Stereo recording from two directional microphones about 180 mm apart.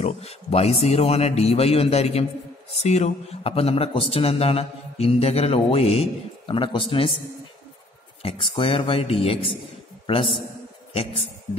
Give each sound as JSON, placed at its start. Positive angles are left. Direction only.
{"t": 0.0, "sound": "mantra", "side_deg": 35}
{"t": 8.2, "sound": "mantra", "side_deg": 30}
{"t": 10.0, "sound": "a man's voice", "side_deg": 30}